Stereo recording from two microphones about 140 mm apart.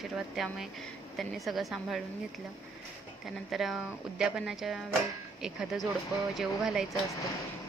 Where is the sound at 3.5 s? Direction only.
Centre (ahead or behind).